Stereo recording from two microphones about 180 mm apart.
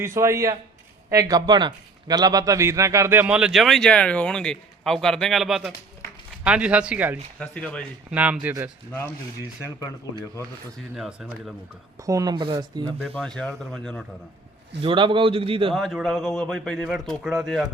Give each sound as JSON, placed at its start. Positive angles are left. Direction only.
{"t": 0.0, "sound": "a man's voice", "side_deg": -15}
{"t": 7.3, "sound": "speech", "side_deg": 5}
{"t": 8.1, "sound": "speech", "side_deg": -10}
{"t": 10.9, "sound": "a man's voice", "side_deg": -5}
{"t": 12.0, "sound": "speech", "side_deg": -20}
{"t": 13.1, "sound": "a man's voice", "side_deg": 5}
{"t": 14.8, "sound": "a man's voice", "side_deg": -30}
{"t": 15.7, "sound": "a man's voice", "side_deg": 0}